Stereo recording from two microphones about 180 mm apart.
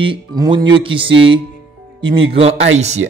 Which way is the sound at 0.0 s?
25° right (ahead or behind).